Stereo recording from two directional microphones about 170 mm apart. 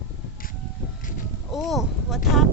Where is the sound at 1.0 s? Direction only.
50° left (ahead or behind).